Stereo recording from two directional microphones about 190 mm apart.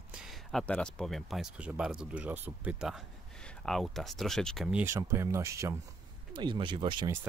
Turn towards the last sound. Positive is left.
turn(degrees=-25)  # may be behind; listen again after turning